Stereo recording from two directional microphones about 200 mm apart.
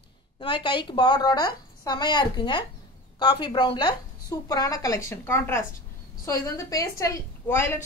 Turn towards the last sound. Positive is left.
turn(degrees=10)  # may be behind; listen again after turning